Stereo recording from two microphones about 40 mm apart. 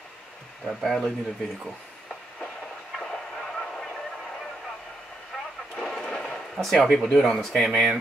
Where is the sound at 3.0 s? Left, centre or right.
Centre.